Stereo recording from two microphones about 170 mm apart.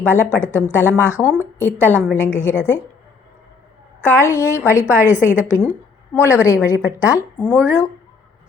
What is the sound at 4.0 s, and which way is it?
Speech, 15° left (ahead or behind).